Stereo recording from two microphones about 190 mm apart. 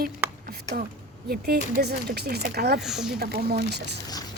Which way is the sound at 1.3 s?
55° right (ahead or behind).